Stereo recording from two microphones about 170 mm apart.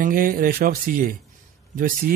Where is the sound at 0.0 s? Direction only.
55° right (ahead or behind).